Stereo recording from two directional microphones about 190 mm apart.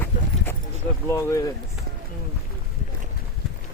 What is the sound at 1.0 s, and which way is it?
Speech, 15° left (ahead or behind).